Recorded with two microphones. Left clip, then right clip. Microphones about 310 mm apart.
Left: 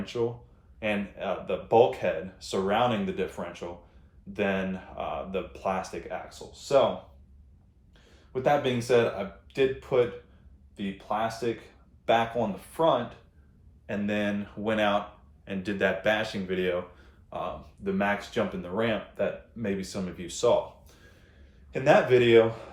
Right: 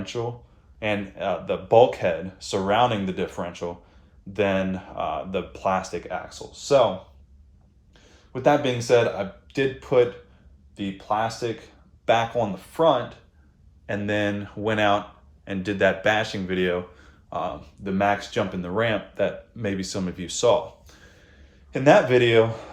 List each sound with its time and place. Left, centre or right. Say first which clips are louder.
0.1 s speech: left 3 dB; right
8.3 s speech: right 4 dB; right
17.2 s a sound: right 6 dB; right
18.6 s speech: right 5 dB; right